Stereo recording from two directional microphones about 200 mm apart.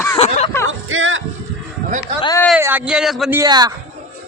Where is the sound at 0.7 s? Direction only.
80° right.